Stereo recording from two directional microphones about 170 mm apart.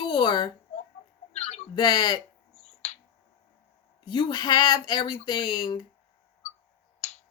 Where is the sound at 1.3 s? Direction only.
40° left (ahead or behind).